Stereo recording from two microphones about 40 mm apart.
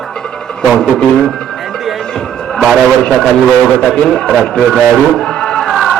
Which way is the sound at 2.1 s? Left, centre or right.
Centre.